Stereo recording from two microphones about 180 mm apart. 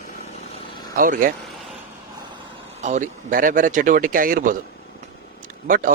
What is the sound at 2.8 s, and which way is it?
Speech, 45° right (ahead or behind).